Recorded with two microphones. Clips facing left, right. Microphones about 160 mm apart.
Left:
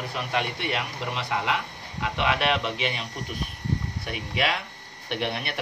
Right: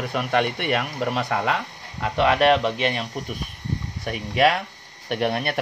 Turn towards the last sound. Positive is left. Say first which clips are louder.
# right 6 dB
turn(degrees=-50)  # may be behind; listen again after turning